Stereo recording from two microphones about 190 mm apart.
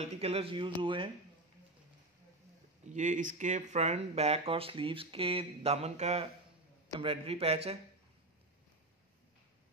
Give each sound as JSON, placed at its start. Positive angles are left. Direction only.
{"t": 0.0, "sound": "speech", "side_deg": -30}
{"t": 2.8, "sound": "speech", "side_deg": -40}